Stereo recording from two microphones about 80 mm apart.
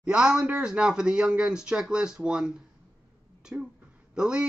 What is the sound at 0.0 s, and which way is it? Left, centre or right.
Speech, centre.